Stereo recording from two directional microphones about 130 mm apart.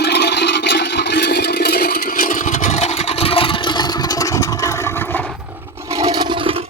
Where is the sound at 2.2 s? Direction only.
70° left (ahead or behind).